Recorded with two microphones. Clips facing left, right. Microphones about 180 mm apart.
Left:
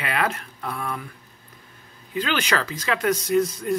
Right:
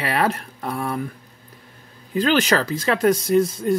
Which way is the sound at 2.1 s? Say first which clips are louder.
Right 6 dB; 40° right (ahead or behind).